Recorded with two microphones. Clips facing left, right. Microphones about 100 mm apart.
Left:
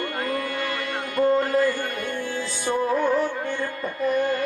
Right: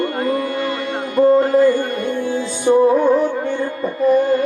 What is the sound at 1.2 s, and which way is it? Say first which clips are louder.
Mantra: right 8 dB; 30° right (ahead or behind).